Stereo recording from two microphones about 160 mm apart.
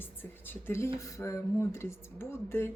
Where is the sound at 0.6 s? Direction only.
15° left (ahead or behind).